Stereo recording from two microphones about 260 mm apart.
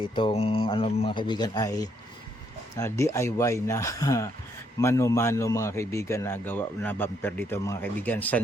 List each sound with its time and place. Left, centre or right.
0.0 s a man's voice: centre